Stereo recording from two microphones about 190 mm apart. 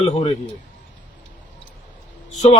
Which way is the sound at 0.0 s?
30° left (ahead or behind).